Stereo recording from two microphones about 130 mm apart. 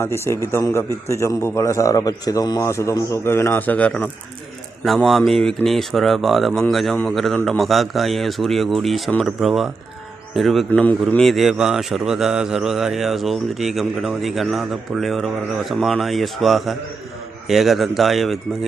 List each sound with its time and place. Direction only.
0.0 s a man's voice: 20° left (ahead or behind); by 10.7 s centre (ahead or behind)
10.7 s a man's voice: 10° left (ahead or behind)
11.1 s speech: centre (ahead or behind)